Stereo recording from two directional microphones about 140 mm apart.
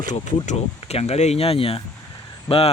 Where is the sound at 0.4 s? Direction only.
45° left (ahead or behind).